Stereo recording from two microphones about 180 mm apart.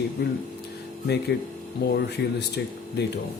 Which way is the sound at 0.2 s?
65° left (ahead or behind).